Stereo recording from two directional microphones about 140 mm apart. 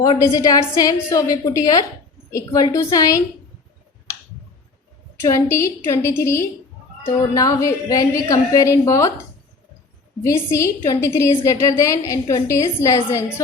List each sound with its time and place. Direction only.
0.3 s a woman's voice: 25° left (ahead or behind)
5.3 s a woman's voice: 20° left (ahead or behind)
10.2 s a woman's voice: 20° left (ahead or behind)